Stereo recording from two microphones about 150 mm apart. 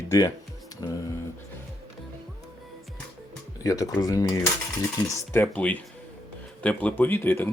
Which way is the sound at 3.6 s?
25° left (ahead or behind).